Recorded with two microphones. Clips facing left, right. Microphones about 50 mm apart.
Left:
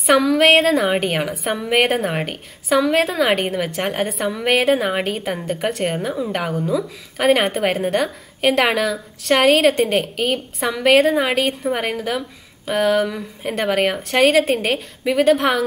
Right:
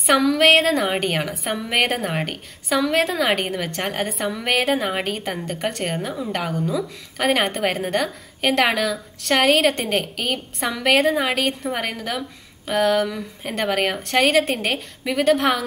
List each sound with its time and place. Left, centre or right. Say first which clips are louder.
0.0 s a woman's voice: left 2 dB; centre